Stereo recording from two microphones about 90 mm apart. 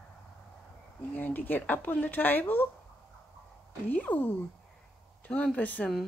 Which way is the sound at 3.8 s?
20° left (ahead or behind).